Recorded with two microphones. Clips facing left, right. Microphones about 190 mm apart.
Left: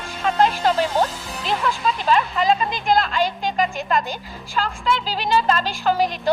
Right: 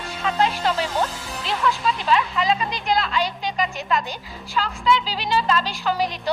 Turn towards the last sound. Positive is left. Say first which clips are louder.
# left 3 dB
turn(degrees=50)  # may be behind; listen again after turning